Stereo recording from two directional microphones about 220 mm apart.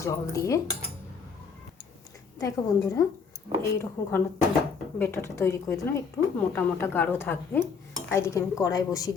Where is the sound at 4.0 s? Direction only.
10° left (ahead or behind).